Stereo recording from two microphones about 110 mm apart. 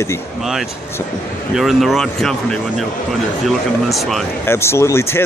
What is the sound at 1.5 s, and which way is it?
Speech, centre (ahead or behind).